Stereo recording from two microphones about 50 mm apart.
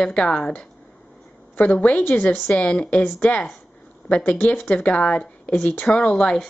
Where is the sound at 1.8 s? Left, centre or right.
Left.